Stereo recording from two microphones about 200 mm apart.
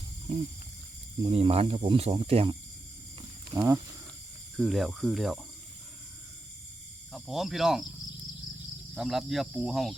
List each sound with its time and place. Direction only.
1.2 s speech: 30° right (ahead or behind)
4.5 s speech: centre (ahead or behind)
7.1 s speech: centre (ahead or behind)
9.0 s speech: centre (ahead or behind)